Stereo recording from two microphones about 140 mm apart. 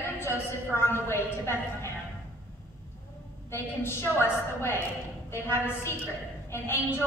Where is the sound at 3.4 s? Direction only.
15° left (ahead or behind).